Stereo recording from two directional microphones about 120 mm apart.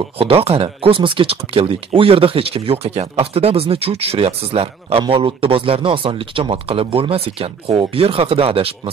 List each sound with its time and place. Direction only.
0.2 s speech: 55° right (ahead or behind)